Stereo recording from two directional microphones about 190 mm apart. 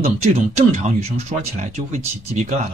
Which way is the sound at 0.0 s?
35° right (ahead or behind).